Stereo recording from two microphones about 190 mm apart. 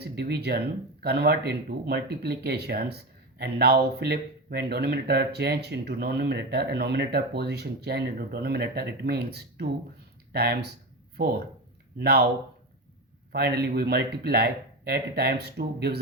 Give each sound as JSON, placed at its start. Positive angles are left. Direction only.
{"t": 0.0, "sound": "speech", "side_deg": -60}
{"t": 11.9, "sound": "speech", "side_deg": -55}
{"t": 13.3, "sound": "speech", "side_deg": -55}